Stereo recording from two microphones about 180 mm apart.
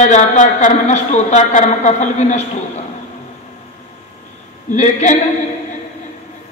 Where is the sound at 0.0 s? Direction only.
40° left (ahead or behind).